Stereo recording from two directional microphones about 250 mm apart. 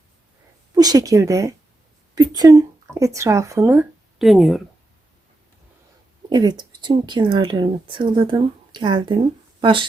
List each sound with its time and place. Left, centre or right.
0.7 s a woman's voice: centre
6.3 s a woman's voice: centre